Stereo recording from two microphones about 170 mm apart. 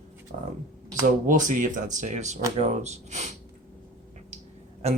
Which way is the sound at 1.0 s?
50° right (ahead or behind).